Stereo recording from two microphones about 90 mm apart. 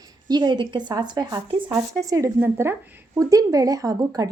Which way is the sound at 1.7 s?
35° right (ahead or behind).